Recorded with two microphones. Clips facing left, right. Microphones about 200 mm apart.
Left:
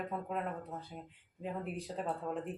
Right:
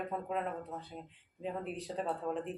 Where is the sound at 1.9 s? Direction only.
Centre (ahead or behind).